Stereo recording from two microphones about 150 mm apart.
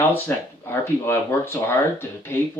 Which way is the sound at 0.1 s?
15° left (ahead or behind).